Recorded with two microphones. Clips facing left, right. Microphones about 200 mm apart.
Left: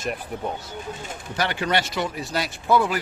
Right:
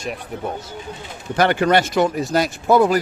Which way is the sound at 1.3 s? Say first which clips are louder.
Right 8 dB; 55° right (ahead or behind).